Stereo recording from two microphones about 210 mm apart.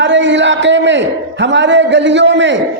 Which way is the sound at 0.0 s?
60° right (ahead or behind).